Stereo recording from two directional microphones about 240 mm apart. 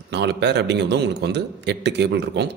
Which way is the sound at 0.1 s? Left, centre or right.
Right.